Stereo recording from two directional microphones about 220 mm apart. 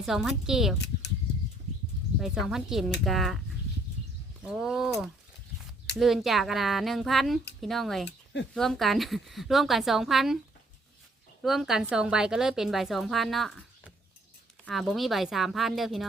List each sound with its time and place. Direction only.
0.0 s a woman's voice: centre (ahead or behind)
2.1 s a woman's voice: centre (ahead or behind)
4.4 s a woman's voice: centre (ahead or behind)
8.0 s a sound: 55° left (ahead or behind)
8.5 s a woman's voice: centre (ahead or behind)
11.4 s a woman's voice: centre (ahead or behind)